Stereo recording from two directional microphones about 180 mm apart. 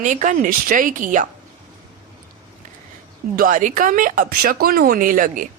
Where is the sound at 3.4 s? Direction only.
45° right (ahead or behind).